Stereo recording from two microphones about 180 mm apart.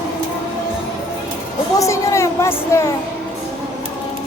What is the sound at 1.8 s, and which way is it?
Speech, 15° left (ahead or behind).